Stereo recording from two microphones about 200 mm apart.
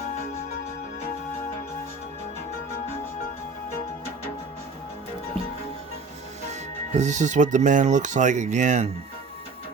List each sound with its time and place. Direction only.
6.5 s speech: 35° right (ahead or behind)